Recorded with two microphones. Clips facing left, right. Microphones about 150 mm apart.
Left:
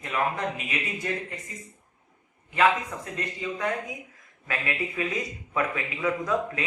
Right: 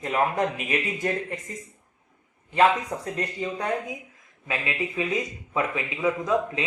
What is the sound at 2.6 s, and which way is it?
Speech, 35° right (ahead or behind).